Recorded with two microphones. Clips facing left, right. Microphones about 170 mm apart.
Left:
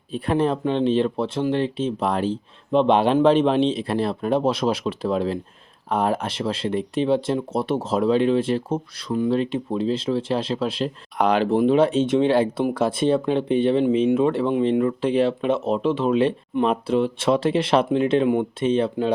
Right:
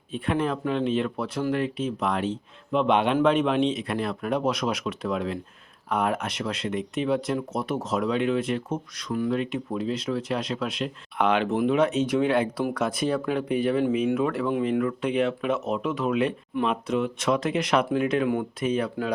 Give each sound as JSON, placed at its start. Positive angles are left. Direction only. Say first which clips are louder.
{"t": 0.1, "sound": "speech", "louder": "left 5 dB", "side_deg": 35}